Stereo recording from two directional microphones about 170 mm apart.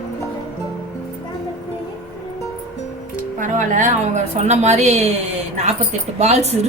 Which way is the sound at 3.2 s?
50° right (ahead or behind).